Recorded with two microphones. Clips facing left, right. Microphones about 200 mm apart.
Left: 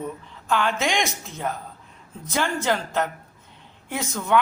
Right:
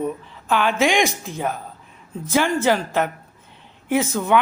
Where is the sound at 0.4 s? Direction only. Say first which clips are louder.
Right 4 dB; 15° right (ahead or behind).